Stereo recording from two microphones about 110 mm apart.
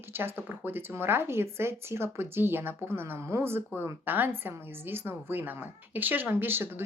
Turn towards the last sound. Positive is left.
turn(degrees=-20)  # may be behind; listen again after turning